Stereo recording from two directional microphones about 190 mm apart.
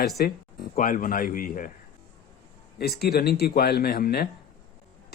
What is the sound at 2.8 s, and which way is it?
Speech, 55° left (ahead or behind).